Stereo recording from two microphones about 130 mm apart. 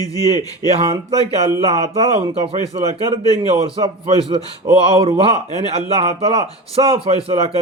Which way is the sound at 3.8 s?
50° right (ahead or behind).